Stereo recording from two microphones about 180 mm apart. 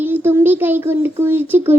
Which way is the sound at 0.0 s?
10° right (ahead or behind).